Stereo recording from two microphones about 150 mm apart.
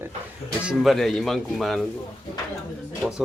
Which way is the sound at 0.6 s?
5° right (ahead or behind).